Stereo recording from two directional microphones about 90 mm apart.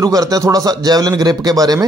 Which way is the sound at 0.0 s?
45° right (ahead or behind).